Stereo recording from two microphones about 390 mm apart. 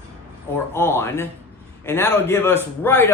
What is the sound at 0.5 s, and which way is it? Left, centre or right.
A man's voice, centre.